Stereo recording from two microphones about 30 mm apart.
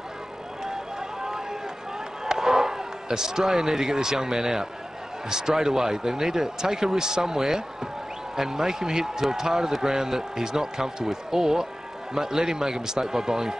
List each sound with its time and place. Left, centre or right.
0.7 s vehicle: centre
2.2 s a man's voice: centre